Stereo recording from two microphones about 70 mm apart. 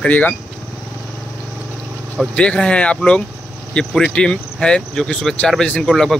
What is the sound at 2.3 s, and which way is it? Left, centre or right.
A man's voice, centre.